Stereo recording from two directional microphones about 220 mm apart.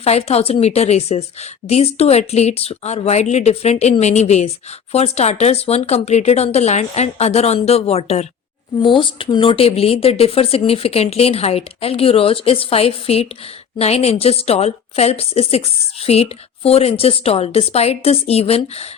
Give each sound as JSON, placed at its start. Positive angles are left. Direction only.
{"t": 0.0, "sound": "speech", "side_deg": 30}